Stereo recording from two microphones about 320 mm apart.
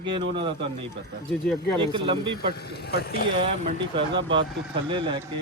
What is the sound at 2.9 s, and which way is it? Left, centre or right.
Speech, left.